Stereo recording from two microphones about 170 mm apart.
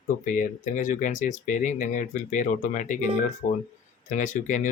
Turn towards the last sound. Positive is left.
turn(degrees=45)  # may be behind; listen again after turning